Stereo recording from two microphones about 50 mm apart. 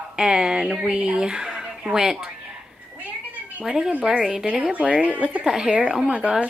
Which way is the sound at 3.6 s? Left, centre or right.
Centre.